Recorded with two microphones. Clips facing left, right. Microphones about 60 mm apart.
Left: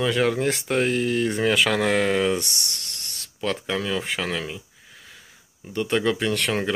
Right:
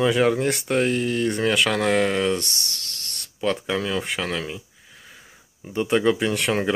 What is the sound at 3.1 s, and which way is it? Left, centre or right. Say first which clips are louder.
Speech: right 3 dB; centre.